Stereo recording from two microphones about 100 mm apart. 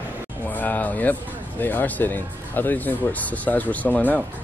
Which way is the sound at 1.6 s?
20° left (ahead or behind).